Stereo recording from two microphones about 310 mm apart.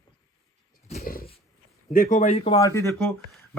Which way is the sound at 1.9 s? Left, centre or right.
Left.